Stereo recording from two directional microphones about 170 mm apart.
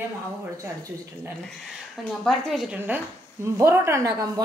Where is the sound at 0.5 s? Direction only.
15° right (ahead or behind).